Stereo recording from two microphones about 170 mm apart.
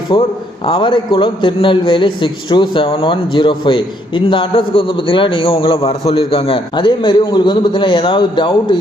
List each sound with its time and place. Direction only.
0.1 s a man's voice: 30° left (ahead or behind)